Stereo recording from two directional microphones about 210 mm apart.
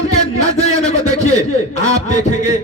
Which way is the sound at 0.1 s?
30° left (ahead or behind).